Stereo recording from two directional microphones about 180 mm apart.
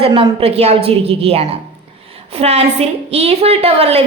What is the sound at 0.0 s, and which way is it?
A woman's voice, 30° right (ahead or behind).